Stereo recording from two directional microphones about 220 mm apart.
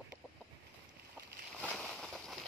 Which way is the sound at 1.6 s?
Centre (ahead or behind).